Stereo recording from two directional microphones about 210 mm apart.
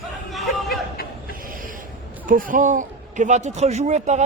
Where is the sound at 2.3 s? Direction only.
40° right (ahead or behind).